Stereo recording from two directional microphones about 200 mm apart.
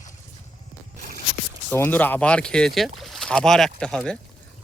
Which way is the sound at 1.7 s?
10° left (ahead or behind).